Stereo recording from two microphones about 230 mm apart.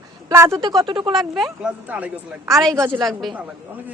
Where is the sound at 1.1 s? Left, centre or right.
Centre.